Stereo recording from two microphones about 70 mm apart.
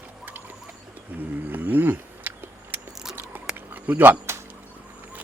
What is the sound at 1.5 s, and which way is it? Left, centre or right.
Wild animals, right.